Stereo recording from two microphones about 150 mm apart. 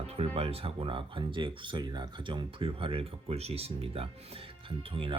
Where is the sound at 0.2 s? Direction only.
40° right (ahead or behind).